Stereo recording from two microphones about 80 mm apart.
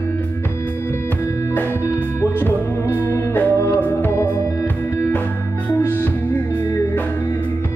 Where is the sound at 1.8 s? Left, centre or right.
Left.